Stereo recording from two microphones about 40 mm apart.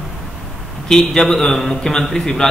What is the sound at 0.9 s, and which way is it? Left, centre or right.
A man's voice, centre.